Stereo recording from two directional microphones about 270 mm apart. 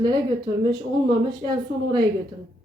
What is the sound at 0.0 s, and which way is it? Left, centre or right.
A woman's voice, centre.